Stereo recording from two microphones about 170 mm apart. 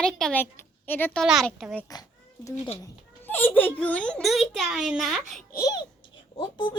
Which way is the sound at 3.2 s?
10° left (ahead or behind).